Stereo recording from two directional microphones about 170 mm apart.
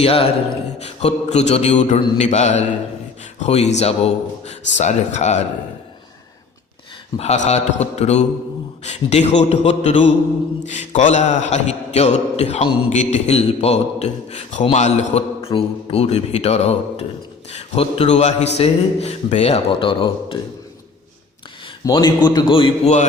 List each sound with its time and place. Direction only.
0.0 s music: 35° left (ahead or behind)
4.8 s speech: 45° left (ahead or behind)
7.2 s music: 40° left (ahead or behind)
21.8 s a man's voice: 25° left (ahead or behind)